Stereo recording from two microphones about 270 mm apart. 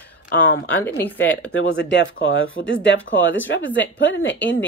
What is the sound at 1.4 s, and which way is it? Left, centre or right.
Speech, left.